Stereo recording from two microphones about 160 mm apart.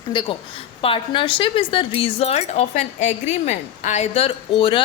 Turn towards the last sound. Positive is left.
turn(degrees=35)  # may be behind; listen again after turning